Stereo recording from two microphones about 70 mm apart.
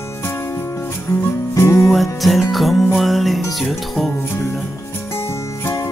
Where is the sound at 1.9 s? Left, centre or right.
Centre.